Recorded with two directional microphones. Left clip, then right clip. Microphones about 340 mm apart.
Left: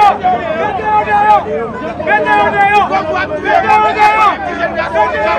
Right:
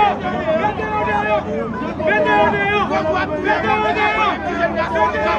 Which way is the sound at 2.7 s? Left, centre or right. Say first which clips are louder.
Left 6 dB; centre.